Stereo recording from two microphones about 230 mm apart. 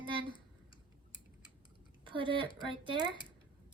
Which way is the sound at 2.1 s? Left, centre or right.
Right.